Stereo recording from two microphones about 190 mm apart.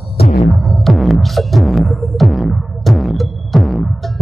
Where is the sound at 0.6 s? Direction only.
Centre (ahead or behind).